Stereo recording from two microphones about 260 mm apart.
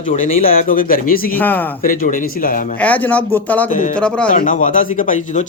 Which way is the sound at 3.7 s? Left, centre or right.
Left.